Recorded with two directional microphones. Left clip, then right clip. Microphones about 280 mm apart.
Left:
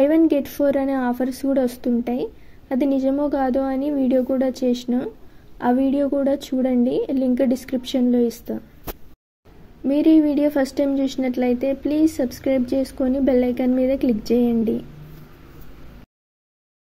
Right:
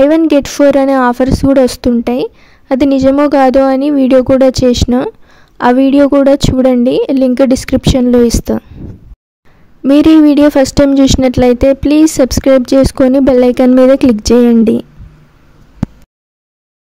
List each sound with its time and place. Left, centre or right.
0.0 s a woman's voice: right
9.8 s a woman's voice: right